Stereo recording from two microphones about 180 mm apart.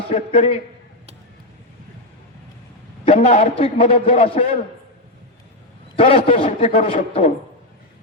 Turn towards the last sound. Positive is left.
turn(degrees=40)  # may be behind; listen again after turning